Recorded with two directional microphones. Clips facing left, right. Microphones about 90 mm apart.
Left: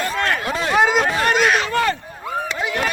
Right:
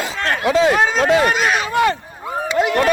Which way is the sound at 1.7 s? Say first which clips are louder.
Right 3 dB; 15° right (ahead or behind).